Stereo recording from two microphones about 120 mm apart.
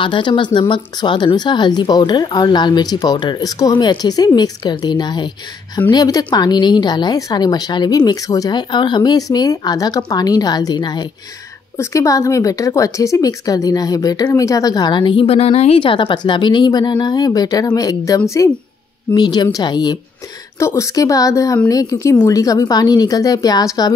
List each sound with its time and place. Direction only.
0.0 s speech: 40° left (ahead or behind)
11.7 s speech: 25° left (ahead or behind)
19.1 s speech: 35° left (ahead or behind)
20.5 s speech: 25° left (ahead or behind)